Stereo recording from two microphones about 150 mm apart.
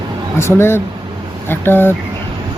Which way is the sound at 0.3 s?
15° left (ahead or behind).